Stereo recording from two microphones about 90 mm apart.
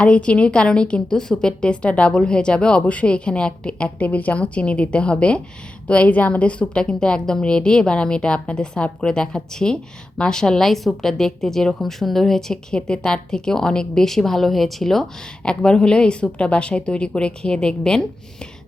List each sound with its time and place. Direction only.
0.0 s a woman's voice: 15° left (ahead or behind)